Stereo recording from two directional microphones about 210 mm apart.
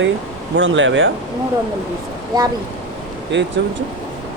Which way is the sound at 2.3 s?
20° right (ahead or behind).